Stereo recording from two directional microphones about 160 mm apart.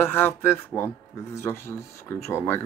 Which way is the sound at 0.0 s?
15° left (ahead or behind).